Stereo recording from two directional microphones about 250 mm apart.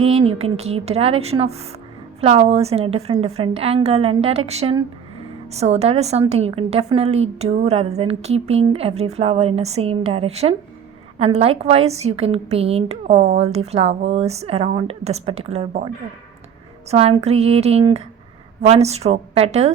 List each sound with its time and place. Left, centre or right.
0.0 s a woman's voice: right
16.9 s a woman's voice: right